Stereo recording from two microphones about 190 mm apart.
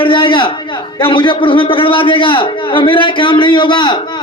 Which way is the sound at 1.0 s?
25° left (ahead or behind).